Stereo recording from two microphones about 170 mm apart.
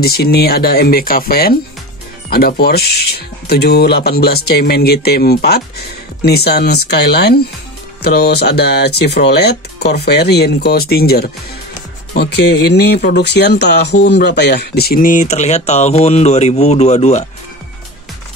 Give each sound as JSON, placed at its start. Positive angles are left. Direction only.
{"t": 0.0, "sound": "speech", "side_deg": 65}